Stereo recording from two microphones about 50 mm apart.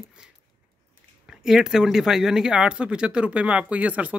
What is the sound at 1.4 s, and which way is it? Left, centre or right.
Speech, centre.